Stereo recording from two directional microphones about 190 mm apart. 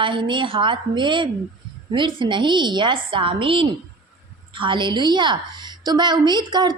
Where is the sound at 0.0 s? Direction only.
25° right (ahead or behind).